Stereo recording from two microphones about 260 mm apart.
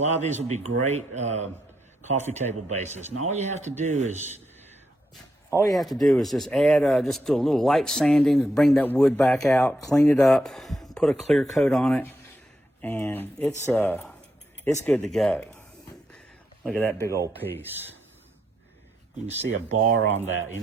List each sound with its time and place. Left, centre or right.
0.0 s speech: right
5.7 s speech: centre
16.6 s speech: centre
17.2 s speech: centre
19.4 s speech: right